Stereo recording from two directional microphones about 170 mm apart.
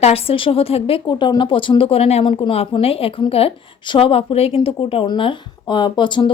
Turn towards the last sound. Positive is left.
turn(degrees=25)  # may be behind; listen again after turning